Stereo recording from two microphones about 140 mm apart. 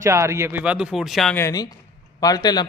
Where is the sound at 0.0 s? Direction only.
20° right (ahead or behind); by 1.4 s centre (ahead or behind).